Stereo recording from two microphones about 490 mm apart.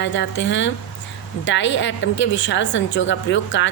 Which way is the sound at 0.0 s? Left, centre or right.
Left.